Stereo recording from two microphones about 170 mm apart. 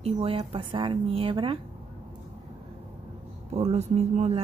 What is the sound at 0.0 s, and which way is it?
Speech, 35° right (ahead or behind).